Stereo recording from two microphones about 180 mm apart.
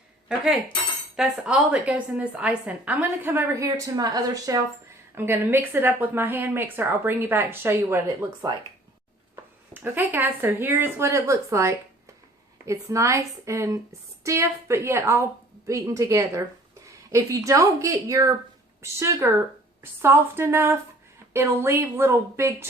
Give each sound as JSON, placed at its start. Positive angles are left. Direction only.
{"t": 1.1, "sound": "a woman's voice", "side_deg": -5}